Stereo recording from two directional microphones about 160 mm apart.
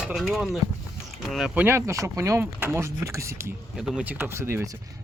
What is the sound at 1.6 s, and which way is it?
Speech, 15° right (ahead or behind).